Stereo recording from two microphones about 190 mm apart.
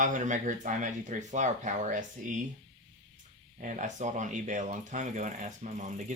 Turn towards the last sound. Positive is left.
turn(degrees=-40)  # may be behind; listen again after turning